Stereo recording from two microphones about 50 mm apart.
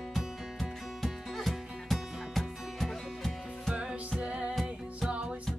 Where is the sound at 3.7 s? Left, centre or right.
Right.